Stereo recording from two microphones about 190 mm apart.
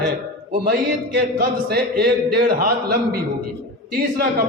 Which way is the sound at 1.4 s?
55° right (ahead or behind).